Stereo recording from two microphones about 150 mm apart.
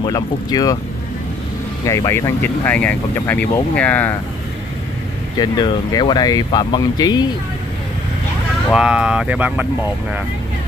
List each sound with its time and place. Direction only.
0.0 s speech: 25° left (ahead or behind)
1.9 s speech: 20° left (ahead or behind)
5.4 s speech: 30° left (ahead or behind)
8.7 s speech: 5° right (ahead or behind)